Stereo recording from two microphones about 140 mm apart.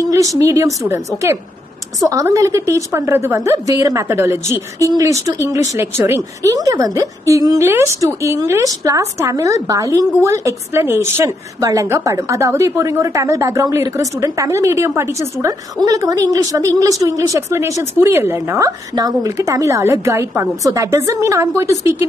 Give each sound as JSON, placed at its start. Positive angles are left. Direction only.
{"t": 0.0, "sound": "a woman's voice", "side_deg": -25}